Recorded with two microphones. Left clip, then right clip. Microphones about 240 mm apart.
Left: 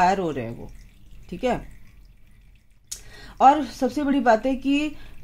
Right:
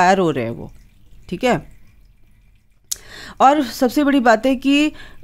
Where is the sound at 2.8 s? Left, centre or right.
Right.